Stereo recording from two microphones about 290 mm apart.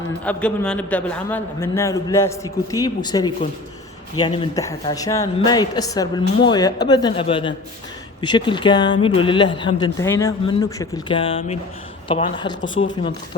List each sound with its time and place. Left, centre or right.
0.3 s a man's voice: centre
12.6 s speech: left